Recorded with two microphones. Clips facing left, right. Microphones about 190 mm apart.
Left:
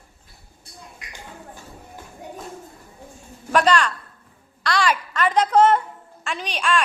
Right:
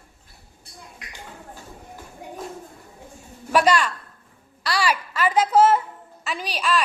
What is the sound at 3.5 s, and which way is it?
A woman's voice, 10° right (ahead or behind).